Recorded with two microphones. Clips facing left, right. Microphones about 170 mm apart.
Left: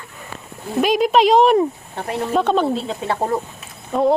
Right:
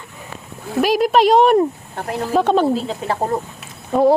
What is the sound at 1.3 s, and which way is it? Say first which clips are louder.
A woman's voice: right 1 dB; centre (ahead or behind).